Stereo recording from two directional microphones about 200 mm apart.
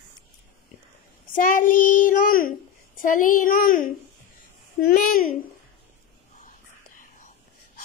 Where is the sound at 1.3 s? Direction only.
40° left (ahead or behind).